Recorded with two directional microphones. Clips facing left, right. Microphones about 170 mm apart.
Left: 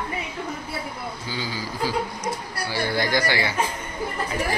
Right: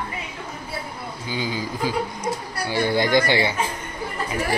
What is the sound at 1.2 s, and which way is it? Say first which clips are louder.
Speech: right 6 dB; 15° right (ahead or behind).